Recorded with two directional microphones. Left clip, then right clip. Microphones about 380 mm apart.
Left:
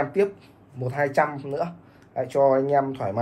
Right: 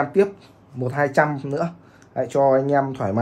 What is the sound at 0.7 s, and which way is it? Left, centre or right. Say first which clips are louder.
Speech: right 3 dB; right.